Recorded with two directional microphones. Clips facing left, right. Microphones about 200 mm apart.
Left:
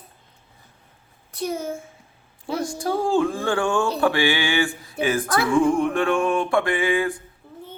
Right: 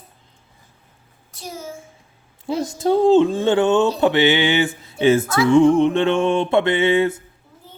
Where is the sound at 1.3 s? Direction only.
60° left (ahead or behind).